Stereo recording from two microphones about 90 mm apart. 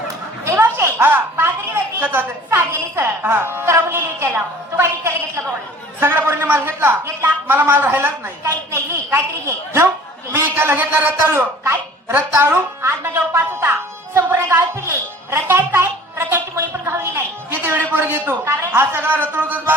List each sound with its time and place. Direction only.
0.4 s a woman's voice: 30° right (ahead or behind)
6.0 s a woman's voice: 25° right (ahead or behind)
10.3 s a man's voice: 25° right (ahead or behind)